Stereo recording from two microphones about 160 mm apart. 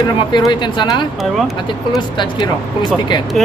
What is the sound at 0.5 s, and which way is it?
Speech, 30° left (ahead or behind).